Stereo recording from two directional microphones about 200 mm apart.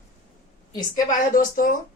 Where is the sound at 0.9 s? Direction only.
45° left (ahead or behind).